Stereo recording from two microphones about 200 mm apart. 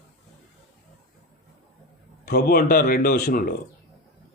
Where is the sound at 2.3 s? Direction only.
50° left (ahead or behind).